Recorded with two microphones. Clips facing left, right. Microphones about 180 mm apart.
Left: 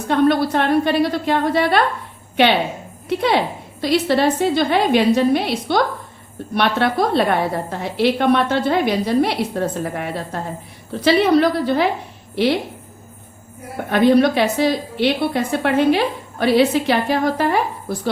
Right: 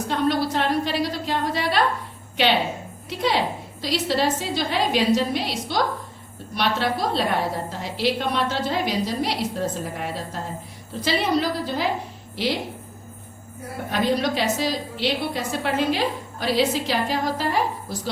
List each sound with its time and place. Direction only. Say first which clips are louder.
0.1 s a woman's voice: left 7 dB; 55° left (ahead or behind)
13.9 s a woman's voice: left 9 dB; 60° left (ahead or behind)